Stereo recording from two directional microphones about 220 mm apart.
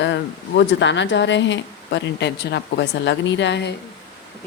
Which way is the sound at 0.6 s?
55° left (ahead or behind).